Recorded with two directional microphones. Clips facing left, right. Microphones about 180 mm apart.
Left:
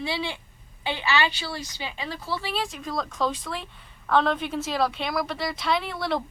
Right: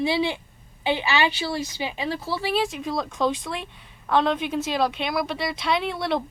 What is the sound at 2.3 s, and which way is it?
Speech, 5° right (ahead or behind).